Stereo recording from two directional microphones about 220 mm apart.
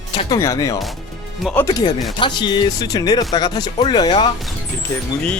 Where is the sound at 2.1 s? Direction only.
20° left (ahead or behind).